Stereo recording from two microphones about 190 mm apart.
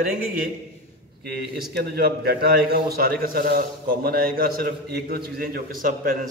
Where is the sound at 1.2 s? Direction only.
55° right (ahead or behind).